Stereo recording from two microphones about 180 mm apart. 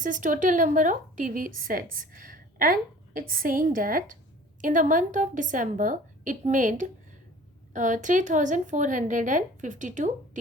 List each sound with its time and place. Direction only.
0.0 s a woman's voice: 45° right (ahead or behind)